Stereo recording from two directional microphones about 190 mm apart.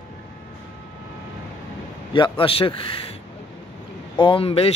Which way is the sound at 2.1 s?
25° left (ahead or behind).